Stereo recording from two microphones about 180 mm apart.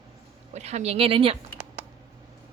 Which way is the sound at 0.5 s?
35° right (ahead or behind).